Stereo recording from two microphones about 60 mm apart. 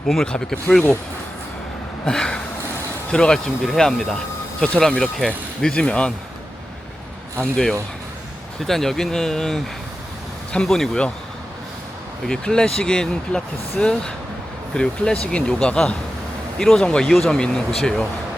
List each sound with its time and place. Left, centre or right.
0.3 s speech: centre
2.0 s speech: centre
7.5 s speech: centre
12.3 s speech: centre